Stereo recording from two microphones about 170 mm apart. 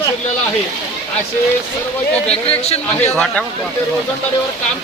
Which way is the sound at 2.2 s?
40° left (ahead or behind).